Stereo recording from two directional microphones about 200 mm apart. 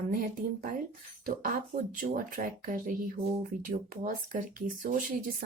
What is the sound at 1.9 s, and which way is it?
A woman's voice, 40° right (ahead or behind).